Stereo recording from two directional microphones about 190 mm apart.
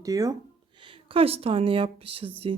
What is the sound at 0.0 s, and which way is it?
Speech, 15° right (ahead or behind).